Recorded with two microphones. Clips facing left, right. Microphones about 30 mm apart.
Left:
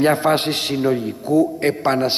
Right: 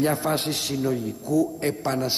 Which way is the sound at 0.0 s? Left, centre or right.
Left.